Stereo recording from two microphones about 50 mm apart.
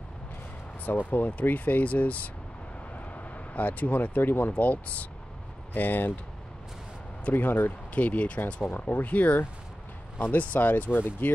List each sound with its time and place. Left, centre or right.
0.8 s speech: left
3.5 s speech: left
4.5 s speech: left
5.7 s speech: left
7.2 s speech: left
10.1 s speech: left